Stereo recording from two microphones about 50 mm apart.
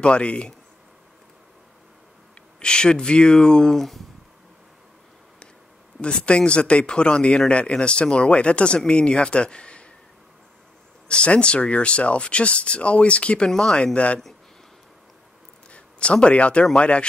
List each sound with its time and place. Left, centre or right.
0.0 s speech: left
2.6 s speech: centre
5.9 s speech: left
11.1 s speech: left
13.5 s speech: centre
13.9 s speech: left
15.7 s speech: left